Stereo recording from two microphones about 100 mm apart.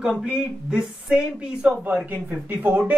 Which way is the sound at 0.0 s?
10° right (ahead or behind).